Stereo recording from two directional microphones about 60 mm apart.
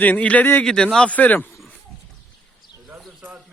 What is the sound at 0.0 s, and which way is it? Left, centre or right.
Speech, left.